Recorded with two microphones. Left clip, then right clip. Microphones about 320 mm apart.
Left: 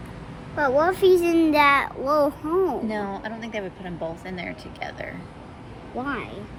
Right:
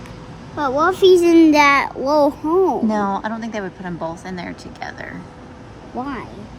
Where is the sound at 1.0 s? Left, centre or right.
Right.